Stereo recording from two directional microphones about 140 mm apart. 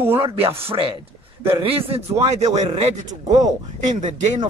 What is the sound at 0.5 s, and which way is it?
Speech, 40° right (ahead or behind).